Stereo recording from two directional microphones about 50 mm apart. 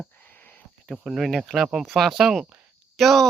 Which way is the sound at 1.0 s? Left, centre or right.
Centre.